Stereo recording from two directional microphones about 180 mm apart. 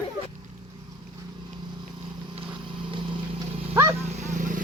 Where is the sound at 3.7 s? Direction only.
15° right (ahead or behind).